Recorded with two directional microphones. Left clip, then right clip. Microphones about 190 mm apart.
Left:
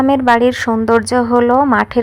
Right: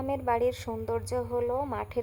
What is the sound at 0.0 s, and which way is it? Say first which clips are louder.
A woman's voice: left 16 dB; 30° left (ahead or behind).